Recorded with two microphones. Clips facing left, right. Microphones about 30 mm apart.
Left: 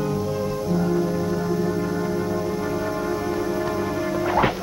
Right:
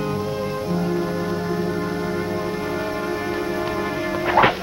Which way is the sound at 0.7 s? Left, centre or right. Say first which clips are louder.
Left 2 dB; centre.